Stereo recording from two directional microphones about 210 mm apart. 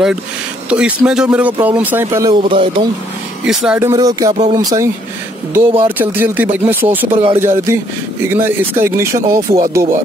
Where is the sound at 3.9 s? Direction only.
15° right (ahead or behind).